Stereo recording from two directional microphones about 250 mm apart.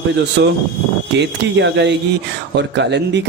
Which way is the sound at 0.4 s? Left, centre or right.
Right.